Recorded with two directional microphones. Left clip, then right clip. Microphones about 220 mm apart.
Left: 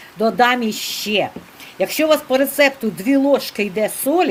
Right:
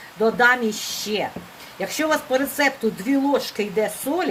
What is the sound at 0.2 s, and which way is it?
Speech, 45° left (ahead or behind).